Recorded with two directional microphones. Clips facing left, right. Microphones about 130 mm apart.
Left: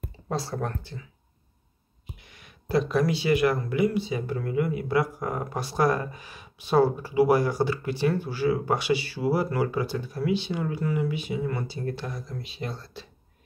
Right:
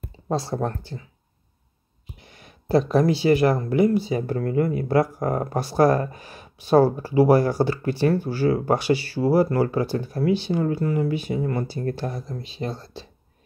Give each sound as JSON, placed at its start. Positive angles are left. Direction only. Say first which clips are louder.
{"t": 0.3, "sound": "speech", "louder": "right 5 dB", "side_deg": -25}
{"t": 2.1, "sound": "speech", "louder": "right 4 dB", "side_deg": -35}
{"t": 12.3, "sound": "speech", "louder": "right 5 dB", "side_deg": -30}